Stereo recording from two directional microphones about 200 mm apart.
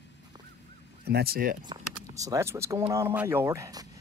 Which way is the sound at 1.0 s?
50° right (ahead or behind).